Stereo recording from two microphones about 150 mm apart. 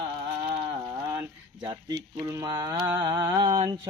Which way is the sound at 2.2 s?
20° right (ahead or behind).